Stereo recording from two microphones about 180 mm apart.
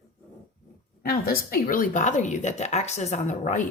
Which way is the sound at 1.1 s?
55° left (ahead or behind).